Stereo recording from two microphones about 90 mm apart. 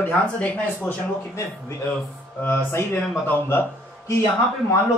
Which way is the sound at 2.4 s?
25° left (ahead or behind).